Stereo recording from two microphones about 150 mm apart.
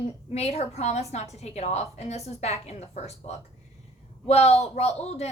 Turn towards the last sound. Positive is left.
turn(degrees=45)  # may be behind; listen again after turning